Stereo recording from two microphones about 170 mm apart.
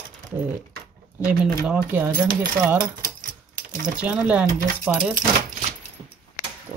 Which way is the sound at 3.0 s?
50° right (ahead or behind).